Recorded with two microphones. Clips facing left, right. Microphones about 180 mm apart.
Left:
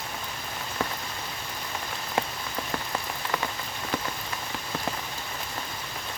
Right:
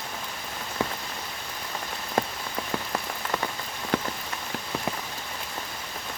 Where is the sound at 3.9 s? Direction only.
60° right (ahead or behind).